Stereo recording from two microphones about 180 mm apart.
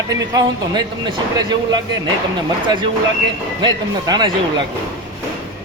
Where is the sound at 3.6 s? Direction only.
25° right (ahead or behind).